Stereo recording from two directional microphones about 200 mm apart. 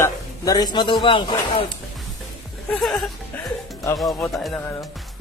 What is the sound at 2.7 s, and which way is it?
Speech, centre (ahead or behind).